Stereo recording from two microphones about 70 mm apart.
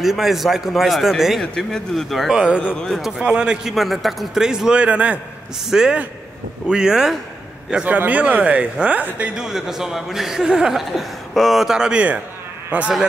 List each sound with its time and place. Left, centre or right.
0.0 s speech: centre
2.3 s a man's voice: centre
3.3 s a man's voice: centre
3.6 s a man's voice: centre
5.7 s a man's voice: centre
7.7 s speech: right
9.3 s speech: centre